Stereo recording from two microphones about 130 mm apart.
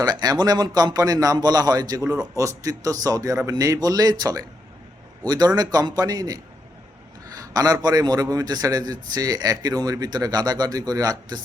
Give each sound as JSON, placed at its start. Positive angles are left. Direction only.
{"t": 0.0, "sound": "speech", "side_deg": -30}
{"t": 7.5, "sound": "speech", "side_deg": -30}